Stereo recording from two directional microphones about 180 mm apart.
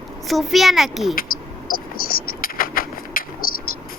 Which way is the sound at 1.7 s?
55° left (ahead or behind).